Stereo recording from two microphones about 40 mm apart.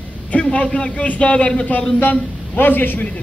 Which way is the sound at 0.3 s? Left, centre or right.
Left.